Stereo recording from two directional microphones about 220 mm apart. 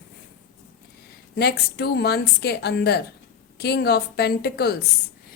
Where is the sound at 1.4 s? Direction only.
45° left (ahead or behind).